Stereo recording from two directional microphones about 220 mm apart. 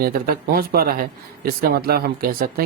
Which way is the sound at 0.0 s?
40° right (ahead or behind).